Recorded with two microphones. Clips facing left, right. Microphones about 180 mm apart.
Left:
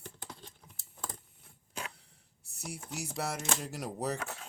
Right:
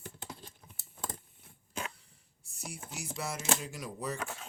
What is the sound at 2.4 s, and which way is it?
Speech, 65° left (ahead or behind).